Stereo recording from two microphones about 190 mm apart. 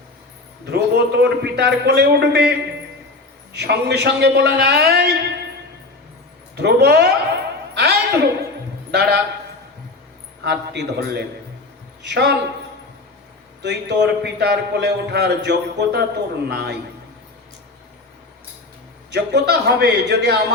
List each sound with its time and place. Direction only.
0.6 s a man's voice: 60° right (ahead or behind)
6.6 s a man's voice: 60° right (ahead or behind)
7.7 s a sound: 60° right (ahead or behind)
8.9 s a man's voice: 60° right (ahead or behind)
10.4 s a man's voice: 60° right (ahead or behind)
13.6 s a man's voice: 65° right (ahead or behind)
19.1 s a man's voice: 60° right (ahead or behind)